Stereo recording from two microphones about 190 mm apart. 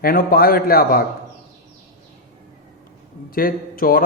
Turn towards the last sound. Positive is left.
turn(degrees=50)  # may be behind; listen again after turning